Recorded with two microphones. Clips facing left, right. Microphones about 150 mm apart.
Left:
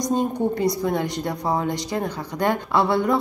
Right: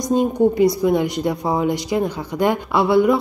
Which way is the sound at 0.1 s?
15° right (ahead or behind).